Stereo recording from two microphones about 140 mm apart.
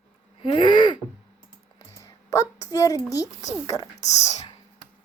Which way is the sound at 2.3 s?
20° left (ahead or behind).